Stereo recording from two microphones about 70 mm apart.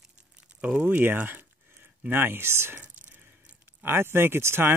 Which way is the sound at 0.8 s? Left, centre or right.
Right.